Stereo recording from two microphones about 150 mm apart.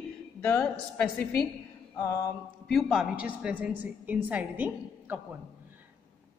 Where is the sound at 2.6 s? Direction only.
Centre (ahead or behind).